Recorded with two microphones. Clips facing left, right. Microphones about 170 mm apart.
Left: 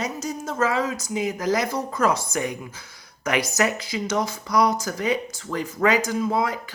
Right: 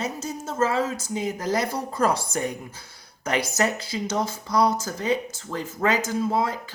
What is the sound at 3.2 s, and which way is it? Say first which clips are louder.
Speech: left 1 dB; 30° right (ahead or behind).